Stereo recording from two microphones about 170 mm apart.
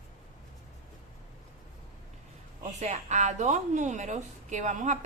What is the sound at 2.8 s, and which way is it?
A woman's voice, 45° right (ahead or behind).